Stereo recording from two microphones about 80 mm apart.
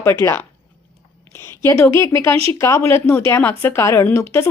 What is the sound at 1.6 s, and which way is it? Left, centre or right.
A woman's voice, left.